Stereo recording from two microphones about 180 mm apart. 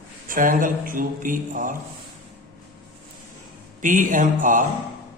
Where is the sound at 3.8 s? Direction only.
45° right (ahead or behind).